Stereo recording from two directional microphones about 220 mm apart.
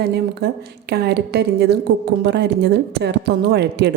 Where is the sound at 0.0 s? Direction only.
45° right (ahead or behind).